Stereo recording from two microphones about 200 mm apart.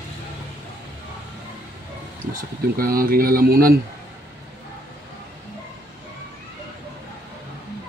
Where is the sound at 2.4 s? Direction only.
45° right (ahead or behind).